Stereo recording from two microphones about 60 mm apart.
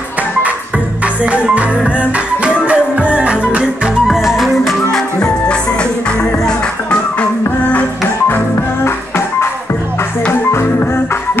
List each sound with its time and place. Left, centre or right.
1.0 s music: right
4.1 s music: centre
4.9 s music: centre
8.8 s music: left